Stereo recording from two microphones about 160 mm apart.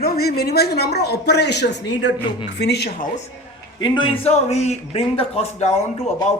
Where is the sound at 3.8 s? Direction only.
30° left (ahead or behind).